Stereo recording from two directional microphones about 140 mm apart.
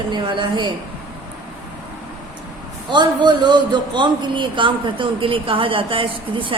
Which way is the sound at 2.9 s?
30° right (ahead or behind).